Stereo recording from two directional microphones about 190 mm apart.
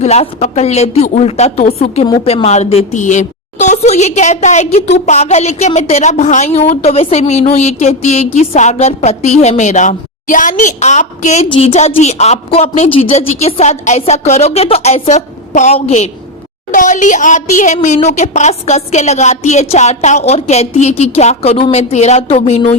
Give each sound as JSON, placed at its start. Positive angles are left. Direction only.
{"t": 0.0, "sound": "a woman's voice", "side_deg": 35}